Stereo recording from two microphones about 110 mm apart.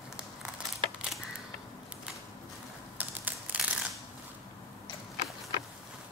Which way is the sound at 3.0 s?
15° right (ahead or behind).